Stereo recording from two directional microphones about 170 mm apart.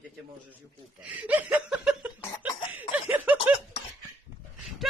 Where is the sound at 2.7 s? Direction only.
10° right (ahead or behind).